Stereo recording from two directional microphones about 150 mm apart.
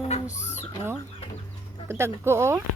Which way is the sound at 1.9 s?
15° right (ahead or behind).